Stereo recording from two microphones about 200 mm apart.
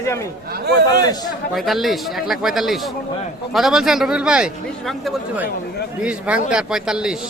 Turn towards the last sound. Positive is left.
turn(degrees=-5)  # may be behind; listen again after turning